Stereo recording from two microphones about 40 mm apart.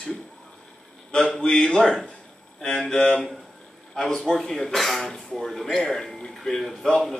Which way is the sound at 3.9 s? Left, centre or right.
Centre.